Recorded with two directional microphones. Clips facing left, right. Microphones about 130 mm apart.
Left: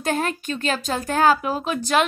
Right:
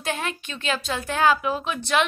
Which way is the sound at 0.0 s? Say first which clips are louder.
Left 5 dB; 45° left (ahead or behind).